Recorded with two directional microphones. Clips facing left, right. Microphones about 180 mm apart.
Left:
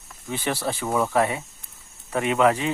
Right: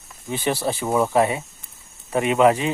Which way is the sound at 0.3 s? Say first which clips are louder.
Right 3 dB; 15° right (ahead or behind).